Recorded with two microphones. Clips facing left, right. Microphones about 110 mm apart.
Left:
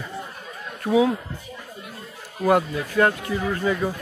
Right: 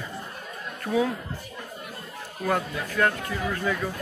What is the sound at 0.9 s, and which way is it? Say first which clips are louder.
Speech: left 6 dB; 25° left (ahead or behind).